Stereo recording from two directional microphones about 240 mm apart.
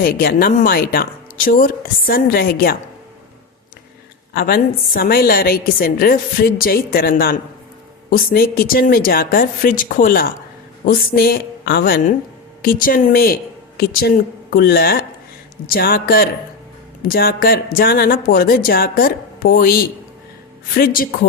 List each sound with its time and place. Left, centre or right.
0.0 s a woman's voice: left
4.4 s a woman's voice: left